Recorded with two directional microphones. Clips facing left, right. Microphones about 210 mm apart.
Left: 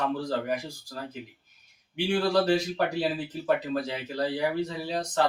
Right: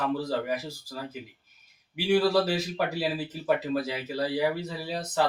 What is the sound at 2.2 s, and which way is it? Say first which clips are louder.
Speech: left 1 dB; 5° right (ahead or behind).